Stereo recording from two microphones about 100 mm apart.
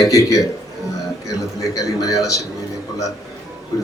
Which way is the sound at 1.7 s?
35° left (ahead or behind).